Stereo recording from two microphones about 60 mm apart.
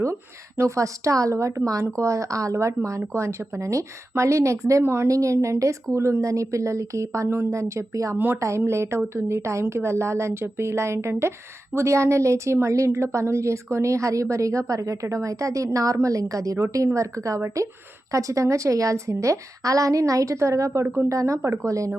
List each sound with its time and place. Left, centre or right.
0.6 s a woman's voice: right
4.8 s a woman's voice: right
5.0 s a woman's voice: right
8.1 s speech: right
8.4 s a woman's voice: right
20.8 s speech: right
21.1 s a woman's voice: right